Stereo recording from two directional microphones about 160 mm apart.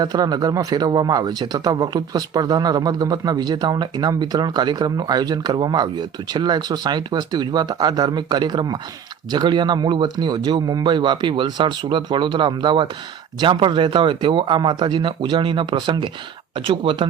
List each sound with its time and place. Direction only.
0.0 s speech: 25° right (ahead or behind)